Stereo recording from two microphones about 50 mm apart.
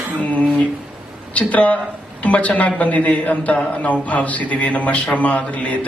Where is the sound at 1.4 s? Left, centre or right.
Left.